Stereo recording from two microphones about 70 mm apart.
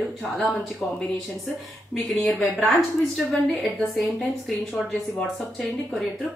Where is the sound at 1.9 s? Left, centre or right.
Centre.